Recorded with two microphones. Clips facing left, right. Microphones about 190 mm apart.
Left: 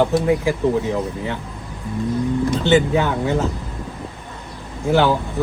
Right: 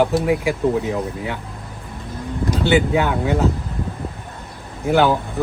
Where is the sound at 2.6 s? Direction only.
10° right (ahead or behind).